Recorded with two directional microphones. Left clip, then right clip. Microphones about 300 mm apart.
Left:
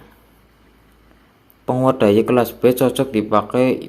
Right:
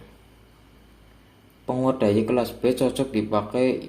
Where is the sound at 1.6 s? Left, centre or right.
Left.